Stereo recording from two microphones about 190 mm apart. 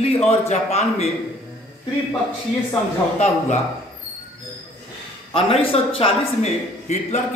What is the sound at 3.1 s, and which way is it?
Speech, 35° left (ahead or behind).